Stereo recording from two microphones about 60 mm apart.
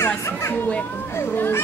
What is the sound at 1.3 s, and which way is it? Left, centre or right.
Speech, left.